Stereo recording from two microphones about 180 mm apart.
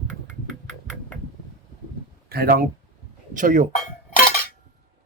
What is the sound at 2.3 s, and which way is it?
Speech, 55° right (ahead or behind).